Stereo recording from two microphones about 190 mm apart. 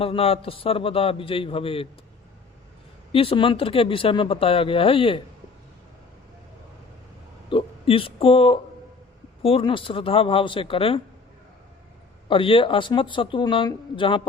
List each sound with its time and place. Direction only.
0.0 s speech: 30° left (ahead or behind)
3.1 s speech: 30° left (ahead or behind)
7.5 s speech: 30° left (ahead or behind)
12.3 s speech: 25° left (ahead or behind)